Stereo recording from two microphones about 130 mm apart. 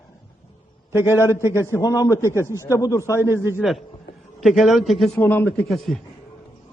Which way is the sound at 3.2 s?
20° right (ahead or behind).